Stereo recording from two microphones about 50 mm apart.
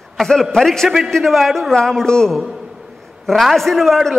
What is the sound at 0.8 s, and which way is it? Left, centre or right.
Speech, centre.